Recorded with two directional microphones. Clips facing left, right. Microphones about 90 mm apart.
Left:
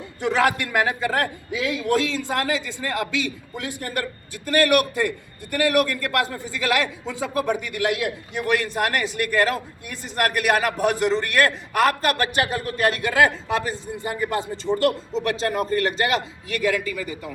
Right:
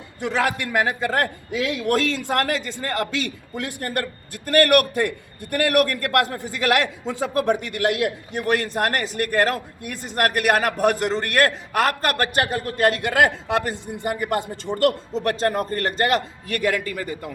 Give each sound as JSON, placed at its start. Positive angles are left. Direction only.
{"t": 1.5, "sound": "a man's voice", "side_deg": -60}
{"t": 14.8, "sound": "a man's voice", "side_deg": -45}